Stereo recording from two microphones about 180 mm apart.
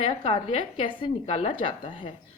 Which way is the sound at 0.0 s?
30° left (ahead or behind).